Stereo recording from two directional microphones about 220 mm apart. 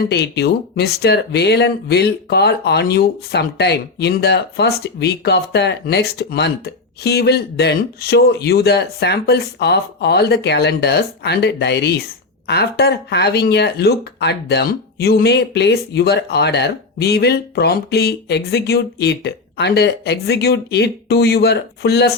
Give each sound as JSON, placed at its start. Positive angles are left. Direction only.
{"t": 0.0, "sound": "speech", "side_deg": 50}